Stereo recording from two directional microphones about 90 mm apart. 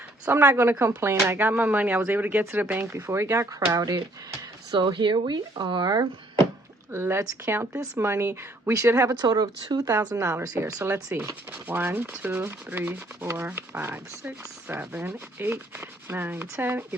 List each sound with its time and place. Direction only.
0.3 s sanding: 25° right (ahead or behind)
2.8 s speech: 30° right (ahead or behind)
4.7 s speech: 60° right (ahead or behind)
6.9 s sanding: 30° right (ahead or behind)
9.1 s speech: 45° right (ahead or behind)
10.6 s sanding: 30° right (ahead or behind)